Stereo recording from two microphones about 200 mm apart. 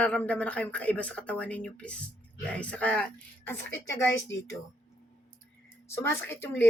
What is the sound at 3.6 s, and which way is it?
Speech, 65° left (ahead or behind).